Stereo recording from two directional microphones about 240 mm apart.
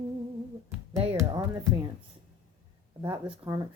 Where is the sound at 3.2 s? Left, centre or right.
Centre.